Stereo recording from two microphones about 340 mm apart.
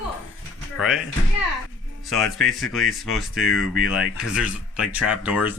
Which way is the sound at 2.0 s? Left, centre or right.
Centre.